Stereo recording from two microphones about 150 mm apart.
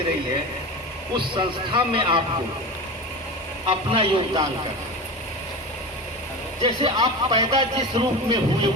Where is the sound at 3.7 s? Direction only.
35° right (ahead or behind).